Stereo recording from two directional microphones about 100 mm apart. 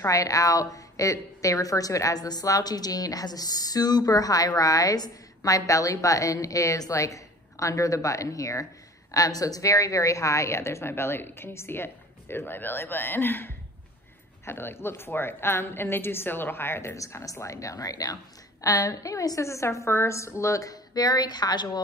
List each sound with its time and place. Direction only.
0.0 s a woman's voice: 35° left (ahead or behind)